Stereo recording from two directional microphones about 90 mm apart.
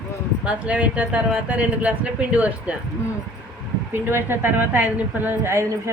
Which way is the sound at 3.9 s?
25° right (ahead or behind).